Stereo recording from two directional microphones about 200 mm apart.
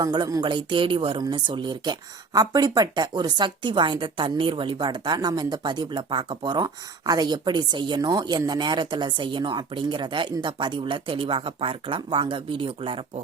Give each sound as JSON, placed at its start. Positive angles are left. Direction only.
{"t": 0.0, "sound": "speech", "side_deg": -20}